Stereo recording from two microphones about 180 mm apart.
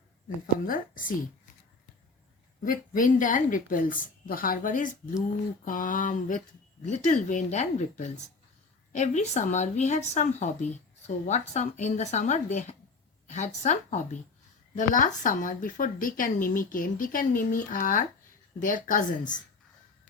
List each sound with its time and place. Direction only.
0.7 s a woman's voice: 50° left (ahead or behind)
2.6 s a woman's voice: 50° left (ahead or behind)